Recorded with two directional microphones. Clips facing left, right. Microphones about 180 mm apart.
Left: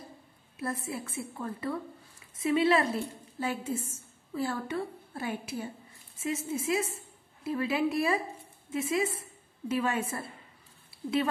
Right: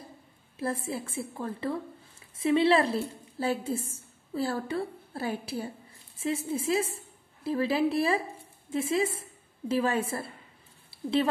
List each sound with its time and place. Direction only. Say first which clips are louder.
0.6 s a woman's voice: right 3 dB; 30° right (ahead or behind)